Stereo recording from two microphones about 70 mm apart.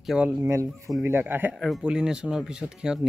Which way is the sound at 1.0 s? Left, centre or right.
Right.